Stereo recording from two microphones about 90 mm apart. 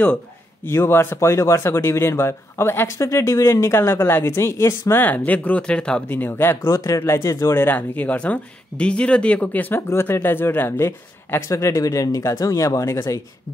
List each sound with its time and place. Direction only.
0.7 s speech: 25° left (ahead or behind)
5.0 s speech: 20° left (ahead or behind)
6.0 s speech: 20° left (ahead or behind)